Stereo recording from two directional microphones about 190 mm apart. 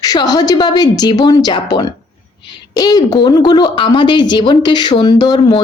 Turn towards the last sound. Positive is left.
turn(degrees=20)  # may be behind; listen again after turning